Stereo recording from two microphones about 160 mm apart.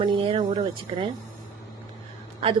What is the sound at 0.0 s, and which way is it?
Speech, 30° right (ahead or behind).